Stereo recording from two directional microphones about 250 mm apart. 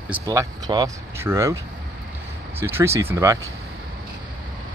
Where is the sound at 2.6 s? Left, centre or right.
Centre.